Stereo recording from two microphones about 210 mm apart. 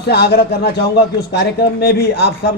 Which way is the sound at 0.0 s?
50° left (ahead or behind).